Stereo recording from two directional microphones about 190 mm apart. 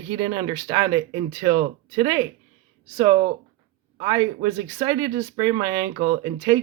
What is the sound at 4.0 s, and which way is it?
Speech, 20° right (ahead or behind).